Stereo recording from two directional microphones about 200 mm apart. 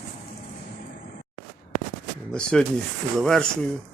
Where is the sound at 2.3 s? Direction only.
5° left (ahead or behind).